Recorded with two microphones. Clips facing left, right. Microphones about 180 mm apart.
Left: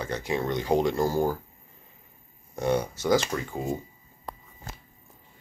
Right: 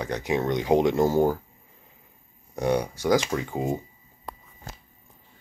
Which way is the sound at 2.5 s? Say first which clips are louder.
Right 1 dB; 15° right (ahead or behind).